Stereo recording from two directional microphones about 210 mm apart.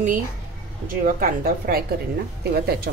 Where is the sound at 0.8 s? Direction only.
40° right (ahead or behind).